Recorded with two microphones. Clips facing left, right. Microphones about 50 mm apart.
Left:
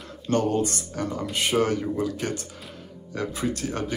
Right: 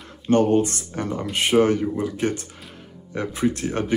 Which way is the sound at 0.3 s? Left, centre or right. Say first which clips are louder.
Right 5 dB; right.